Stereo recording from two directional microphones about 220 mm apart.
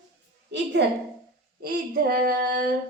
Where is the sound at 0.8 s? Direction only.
50° right (ahead or behind).